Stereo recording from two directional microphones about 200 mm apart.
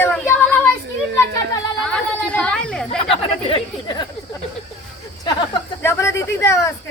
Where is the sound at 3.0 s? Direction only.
25° left (ahead or behind).